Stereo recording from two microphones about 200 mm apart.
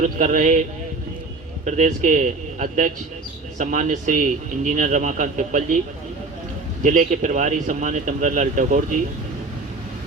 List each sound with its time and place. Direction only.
0.0 s speech: 40° right (ahead or behind)
1.6 s speech: 40° right (ahead or behind)
6.8 s speech: 40° right (ahead or behind)